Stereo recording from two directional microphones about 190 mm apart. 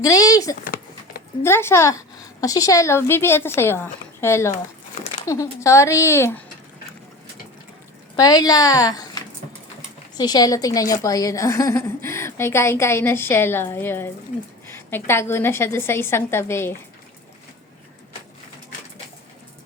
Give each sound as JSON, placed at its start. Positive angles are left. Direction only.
{"t": 0.0, "sound": "speech", "side_deg": 20}
{"t": 0.6, "sound": "a sound", "side_deg": 50}
{"t": 1.4, "sound": "a woman's voice", "side_deg": 10}
{"t": 8.1, "sound": "a woman's voice", "side_deg": 20}